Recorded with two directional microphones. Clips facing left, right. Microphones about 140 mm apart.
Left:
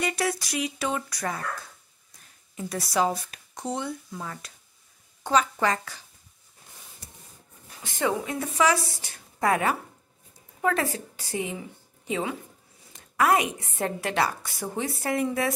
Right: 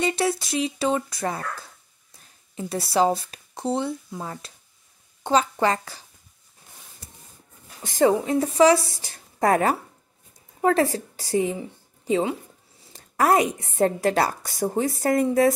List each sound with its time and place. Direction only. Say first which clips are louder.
0.0 s speech: right 4 dB; 25° right (ahead or behind)
2.5 s a woman's voice: right 4 dB; 30° right (ahead or behind)
7.8 s a woman's voice: right 8 dB; 40° right (ahead or behind)